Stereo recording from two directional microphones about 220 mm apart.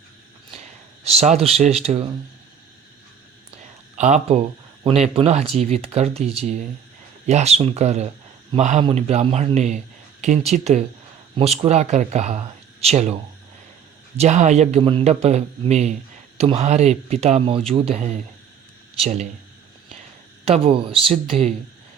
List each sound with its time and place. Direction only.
0.5 s speech: 30° right (ahead or behind)
3.9 s speech: 30° right (ahead or behind)
14.2 s speech: 30° right (ahead or behind)
20.4 s speech: 25° right (ahead or behind)